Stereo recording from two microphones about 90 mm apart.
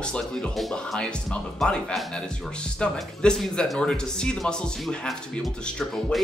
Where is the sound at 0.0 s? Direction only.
10° left (ahead or behind).